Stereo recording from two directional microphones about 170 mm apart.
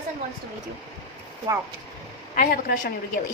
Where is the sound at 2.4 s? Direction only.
55° left (ahead or behind).